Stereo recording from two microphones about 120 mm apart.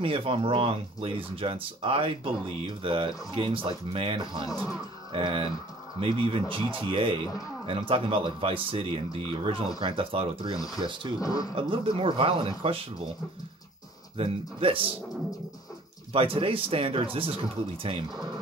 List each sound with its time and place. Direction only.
0.0 s speech: 50° right (ahead or behind)
11.1 s speech: 30° left (ahead or behind)
11.5 s speech: 45° right (ahead or behind)
14.1 s speech: 50° right (ahead or behind)
16.1 s speech: 50° right (ahead or behind)